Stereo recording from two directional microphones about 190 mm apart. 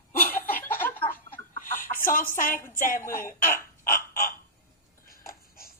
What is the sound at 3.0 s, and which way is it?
Speech, 15° left (ahead or behind).